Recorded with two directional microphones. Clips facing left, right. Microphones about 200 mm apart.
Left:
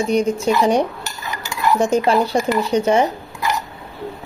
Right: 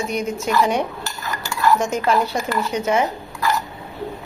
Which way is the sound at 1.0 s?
20° left (ahead or behind).